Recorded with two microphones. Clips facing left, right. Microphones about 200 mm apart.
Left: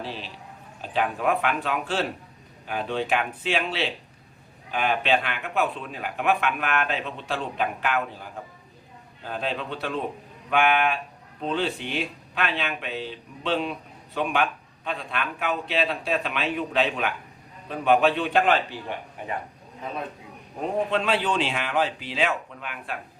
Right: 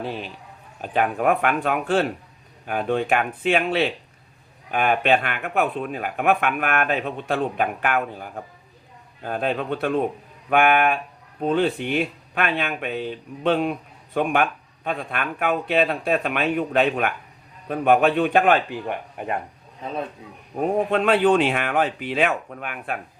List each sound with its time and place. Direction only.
0.0 s speech: 50° right (ahead or behind)
20.9 s speech: 55° right (ahead or behind)